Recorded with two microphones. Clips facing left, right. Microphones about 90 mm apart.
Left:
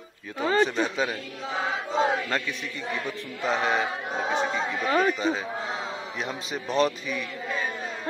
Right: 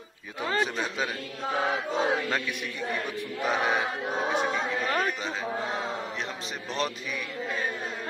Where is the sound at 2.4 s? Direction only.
15° right (ahead or behind).